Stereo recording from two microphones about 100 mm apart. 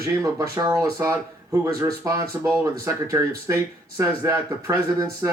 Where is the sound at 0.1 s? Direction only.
35° right (ahead or behind).